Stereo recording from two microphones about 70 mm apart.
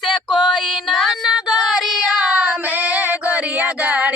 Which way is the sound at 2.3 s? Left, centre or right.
Right.